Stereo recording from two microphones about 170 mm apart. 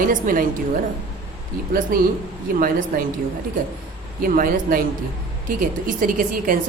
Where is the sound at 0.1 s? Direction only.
55° right (ahead or behind).